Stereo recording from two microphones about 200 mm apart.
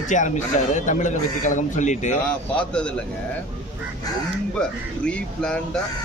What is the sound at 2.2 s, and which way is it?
Speech, 5° left (ahead or behind).